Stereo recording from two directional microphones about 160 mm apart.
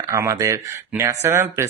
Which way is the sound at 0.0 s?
20° right (ahead or behind).